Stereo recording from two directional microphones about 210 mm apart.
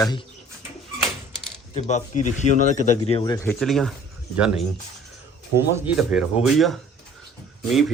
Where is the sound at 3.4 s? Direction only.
Centre (ahead or behind).